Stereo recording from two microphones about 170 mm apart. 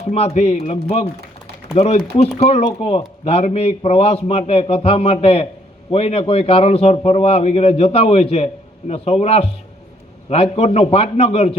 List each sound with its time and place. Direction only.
0.0 s a man's voice: 35° left (ahead or behind)